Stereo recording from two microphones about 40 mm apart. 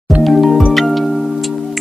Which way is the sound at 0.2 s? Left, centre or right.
Centre.